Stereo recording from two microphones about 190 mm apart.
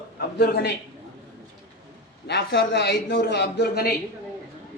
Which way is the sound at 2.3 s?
65° left (ahead or behind).